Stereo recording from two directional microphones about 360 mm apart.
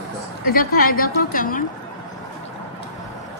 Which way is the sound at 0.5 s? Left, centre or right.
Left.